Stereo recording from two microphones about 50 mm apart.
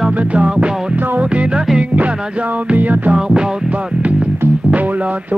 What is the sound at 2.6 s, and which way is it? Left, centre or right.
Speech, right.